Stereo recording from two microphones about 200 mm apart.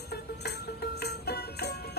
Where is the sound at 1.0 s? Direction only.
55° left (ahead or behind).